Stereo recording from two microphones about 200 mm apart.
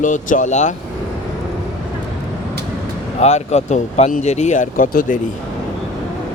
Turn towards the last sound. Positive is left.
turn(degrees=45)  # may be behind; listen again after turning